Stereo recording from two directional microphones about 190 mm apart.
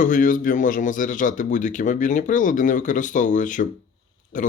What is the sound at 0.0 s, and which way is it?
A man's voice, 45° left (ahead or behind).